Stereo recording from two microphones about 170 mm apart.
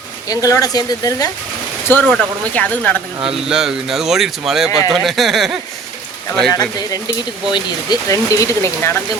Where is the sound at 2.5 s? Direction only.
10° left (ahead or behind).